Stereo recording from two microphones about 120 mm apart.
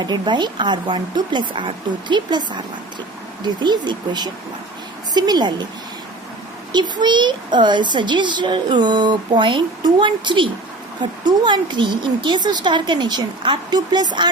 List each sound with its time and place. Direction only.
0.0 s speech: 40° right (ahead or behind)
6.7 s speech: 40° right (ahead or behind)